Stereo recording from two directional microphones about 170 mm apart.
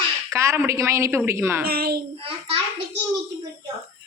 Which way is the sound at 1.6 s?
65° right (ahead or behind).